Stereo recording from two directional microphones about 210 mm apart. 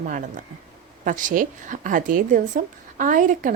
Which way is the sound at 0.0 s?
40° right (ahead or behind).